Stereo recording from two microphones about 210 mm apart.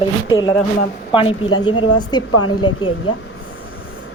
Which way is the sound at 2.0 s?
20° left (ahead or behind).